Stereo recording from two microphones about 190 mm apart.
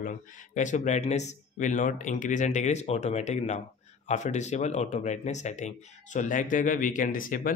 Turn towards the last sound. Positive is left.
turn(degrees=45)  # may be behind; listen again after turning